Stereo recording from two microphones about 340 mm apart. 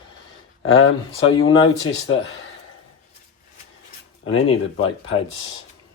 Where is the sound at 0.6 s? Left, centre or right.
Left.